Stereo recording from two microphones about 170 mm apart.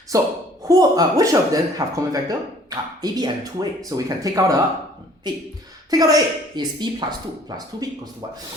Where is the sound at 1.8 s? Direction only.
30° right (ahead or behind).